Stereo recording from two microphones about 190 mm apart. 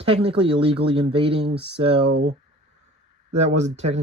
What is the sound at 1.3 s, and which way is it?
Speech, 60° right (ahead or behind).